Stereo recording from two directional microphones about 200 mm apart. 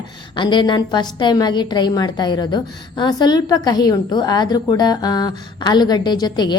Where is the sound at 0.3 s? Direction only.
25° left (ahead or behind).